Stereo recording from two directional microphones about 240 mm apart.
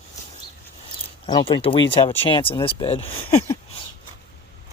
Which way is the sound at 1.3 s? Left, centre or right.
Centre.